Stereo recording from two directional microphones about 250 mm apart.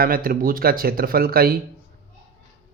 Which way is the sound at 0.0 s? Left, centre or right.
Right.